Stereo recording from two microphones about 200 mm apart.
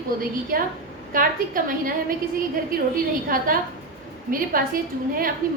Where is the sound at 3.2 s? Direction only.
45° right (ahead or behind).